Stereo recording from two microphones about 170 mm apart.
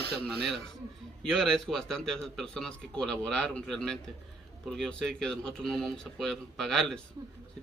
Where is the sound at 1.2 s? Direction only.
5° left (ahead or behind).